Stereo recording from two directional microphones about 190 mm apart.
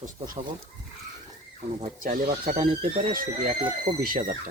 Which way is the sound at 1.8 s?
45° right (ahead or behind).